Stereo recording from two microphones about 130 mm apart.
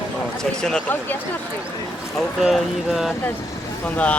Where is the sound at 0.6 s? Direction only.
5° left (ahead or behind).